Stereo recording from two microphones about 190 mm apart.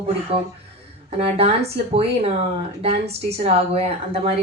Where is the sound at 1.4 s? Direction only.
30° right (ahead or behind).